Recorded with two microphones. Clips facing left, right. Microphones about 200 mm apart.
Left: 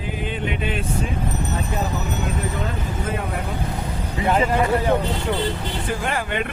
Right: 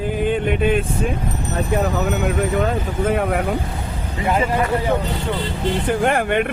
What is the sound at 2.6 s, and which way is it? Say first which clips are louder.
Speech: right 7 dB; 70° right (ahead or behind).